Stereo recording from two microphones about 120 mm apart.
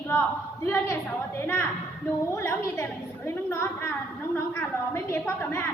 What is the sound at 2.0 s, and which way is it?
A woman's voice, 20° left (ahead or behind).